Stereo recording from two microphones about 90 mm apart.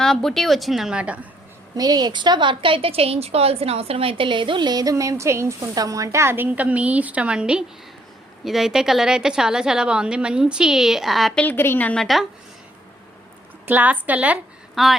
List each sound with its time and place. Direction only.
0.0 s a woman's voice: 5° left (ahead or behind); by 1.3 s 15° right (ahead or behind)
1.7 s a woman's voice: 45° right (ahead or behind); by 11.3 s centre (ahead or behind)
11.5 s a woman's voice: 25° left (ahead or behind)
11.9 s a woman's voice: centre (ahead or behind)
13.7 s a woman's voice: 20° right (ahead or behind)
14.8 s a woman's voice: centre (ahead or behind)